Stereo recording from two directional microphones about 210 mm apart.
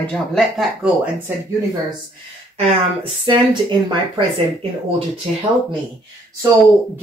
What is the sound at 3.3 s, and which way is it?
Speech, 20° right (ahead or behind).